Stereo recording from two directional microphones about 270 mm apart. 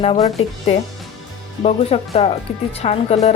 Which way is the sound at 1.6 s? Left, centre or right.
Left.